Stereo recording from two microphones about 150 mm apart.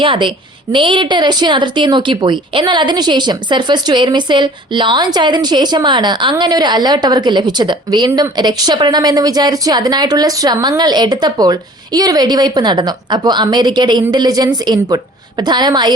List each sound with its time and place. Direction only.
0.0 s a woman's voice: 35° right (ahead or behind)